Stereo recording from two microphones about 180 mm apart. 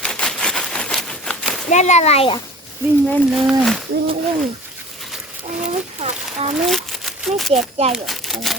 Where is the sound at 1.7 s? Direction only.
40° left (ahead or behind).